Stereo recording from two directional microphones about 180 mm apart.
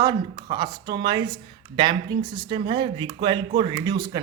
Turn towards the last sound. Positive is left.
turn(degrees=-20)  # may be behind; listen again after turning